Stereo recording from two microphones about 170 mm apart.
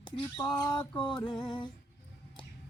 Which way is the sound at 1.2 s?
25° left (ahead or behind).